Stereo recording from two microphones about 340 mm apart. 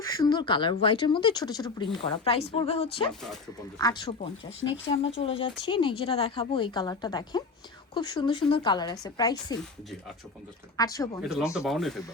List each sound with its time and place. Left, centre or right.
0.0 s speech: centre
3.1 s speech: centre
3.8 s speech: centre
10.8 s speech: centre
11.2 s speech: centre